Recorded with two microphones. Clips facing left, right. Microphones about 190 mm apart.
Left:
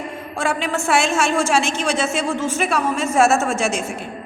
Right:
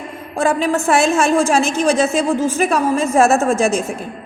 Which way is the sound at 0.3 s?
35° right (ahead or behind).